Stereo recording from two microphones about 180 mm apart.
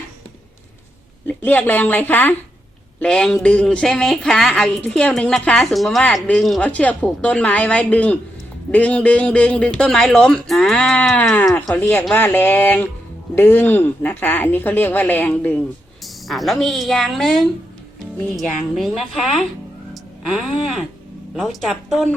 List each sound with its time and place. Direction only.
1.3 s a man's voice: 10° left (ahead or behind)
19.9 s a sound: centre (ahead or behind)
21.3 s a woman's voice: centre (ahead or behind)